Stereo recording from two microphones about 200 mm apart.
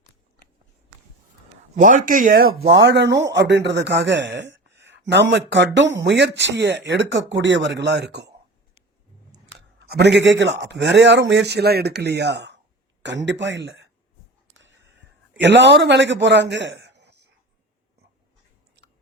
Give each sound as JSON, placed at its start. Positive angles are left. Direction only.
{"t": 1.7, "sound": "speech", "side_deg": -40}
{"t": 2.6, "sound": "speech", "side_deg": -60}
{"t": 9.3, "sound": "a man's voice", "side_deg": -60}
{"t": 14.5, "sound": "a sound", "side_deg": -65}